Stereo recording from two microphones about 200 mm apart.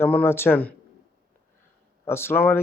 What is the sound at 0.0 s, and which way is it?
Speech, 10° left (ahead or behind).